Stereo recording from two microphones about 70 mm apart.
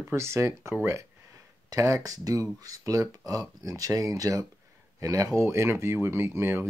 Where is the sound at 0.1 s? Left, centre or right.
Right.